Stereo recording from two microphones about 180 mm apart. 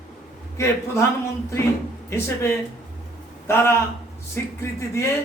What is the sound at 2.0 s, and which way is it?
A man's voice, 15° left (ahead or behind).